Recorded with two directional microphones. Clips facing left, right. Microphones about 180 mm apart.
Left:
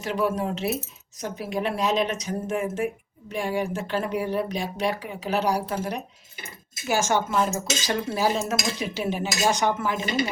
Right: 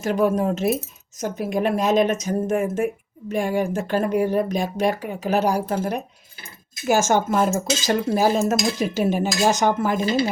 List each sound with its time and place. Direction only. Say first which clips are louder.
0.0 s speech: right 5 dB; 45° right (ahead or behind)